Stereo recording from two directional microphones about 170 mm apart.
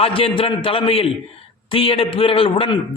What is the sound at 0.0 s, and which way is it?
A man's voice, 30° left (ahead or behind).